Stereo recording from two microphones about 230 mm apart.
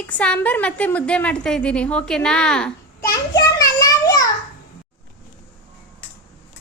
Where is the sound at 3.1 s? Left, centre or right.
Centre.